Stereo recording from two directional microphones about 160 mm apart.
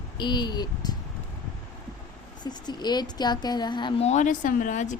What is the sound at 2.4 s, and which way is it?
Speech, 25° left (ahead or behind).